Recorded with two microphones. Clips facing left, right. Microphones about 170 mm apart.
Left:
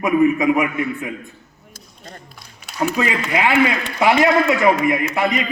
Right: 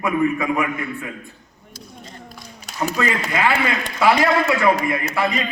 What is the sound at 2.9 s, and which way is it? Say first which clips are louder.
A man's voice: even; 15° left (ahead or behind).